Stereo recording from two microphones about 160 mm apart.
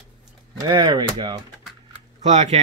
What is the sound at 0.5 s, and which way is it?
Speech, 25° right (ahead or behind).